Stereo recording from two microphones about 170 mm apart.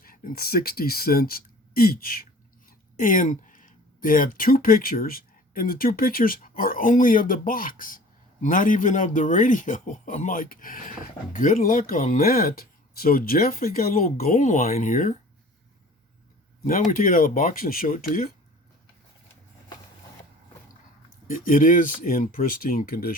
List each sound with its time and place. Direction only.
0.0 s speech: 55° left (ahead or behind)
14.3 s speech: 45° left (ahead or behind)
16.9 s speech: 55° left (ahead or behind)
21.2 s speech: 55° left (ahead or behind)